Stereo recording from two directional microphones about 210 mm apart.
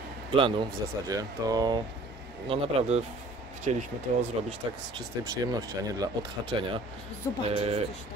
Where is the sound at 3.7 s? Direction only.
30° right (ahead or behind).